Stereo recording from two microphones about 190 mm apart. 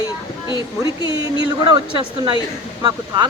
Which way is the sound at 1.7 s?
25° right (ahead or behind).